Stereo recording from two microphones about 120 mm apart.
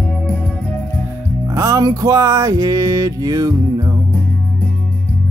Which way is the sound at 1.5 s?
25° right (ahead or behind).